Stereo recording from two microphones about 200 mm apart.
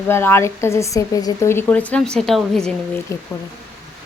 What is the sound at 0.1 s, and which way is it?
A woman's voice, 10° left (ahead or behind).